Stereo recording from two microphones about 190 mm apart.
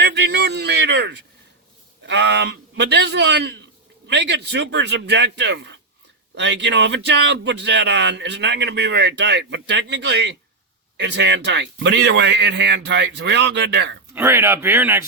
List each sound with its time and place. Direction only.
0.0 s a sound: 65° right (ahead or behind)
2.0 s a man's voice: 65° right (ahead or behind)
14.1 s speech: 15° right (ahead or behind)